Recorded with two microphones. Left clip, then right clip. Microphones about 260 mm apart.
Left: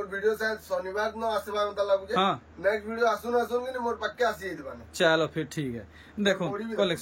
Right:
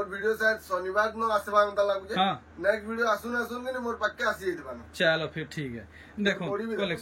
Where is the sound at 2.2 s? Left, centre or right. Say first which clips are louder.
Left 1 dB; centre.